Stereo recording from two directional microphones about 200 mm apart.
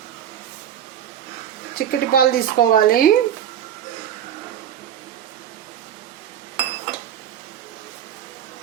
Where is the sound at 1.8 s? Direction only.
50° left (ahead or behind).